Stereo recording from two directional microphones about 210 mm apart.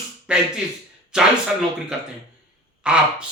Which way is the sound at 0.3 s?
5° right (ahead or behind).